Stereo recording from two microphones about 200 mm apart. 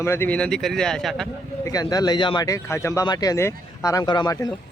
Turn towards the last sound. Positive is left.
turn(degrees=20)  # may be behind; listen again after turning